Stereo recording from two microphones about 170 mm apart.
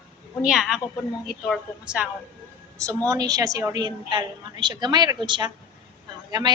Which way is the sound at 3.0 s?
20° right (ahead or behind).